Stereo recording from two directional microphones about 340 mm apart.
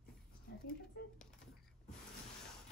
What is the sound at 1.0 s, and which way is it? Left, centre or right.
Typing, left.